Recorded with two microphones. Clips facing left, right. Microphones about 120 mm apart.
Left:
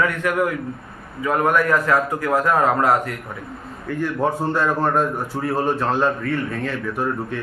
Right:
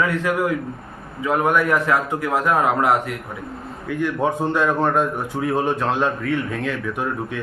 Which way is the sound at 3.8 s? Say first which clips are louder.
Even; 5° right (ahead or behind).